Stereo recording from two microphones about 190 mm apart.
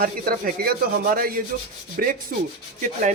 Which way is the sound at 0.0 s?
50° right (ahead or behind).